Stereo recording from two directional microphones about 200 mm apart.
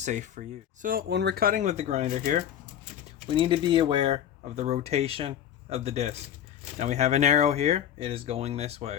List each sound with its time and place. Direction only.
0.0 s speech: 35° right (ahead or behind)
3.2 s speech: 25° right (ahead or behind)